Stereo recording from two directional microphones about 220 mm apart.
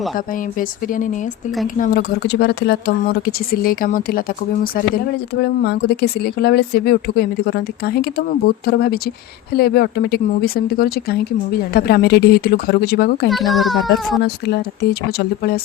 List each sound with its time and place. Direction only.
1.8 s speech: 45° left (ahead or behind)
5.4 s speech: 50° left (ahead or behind)
13.3 s a child's voice: centre (ahead or behind)
14.2 s speech: 45° left (ahead or behind)